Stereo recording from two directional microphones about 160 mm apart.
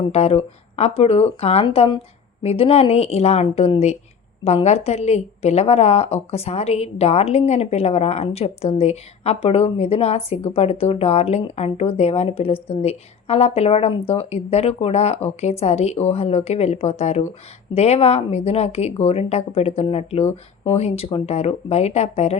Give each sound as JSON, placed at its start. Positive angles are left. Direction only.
{"t": 0.0, "sound": "a woman's voice", "side_deg": 40}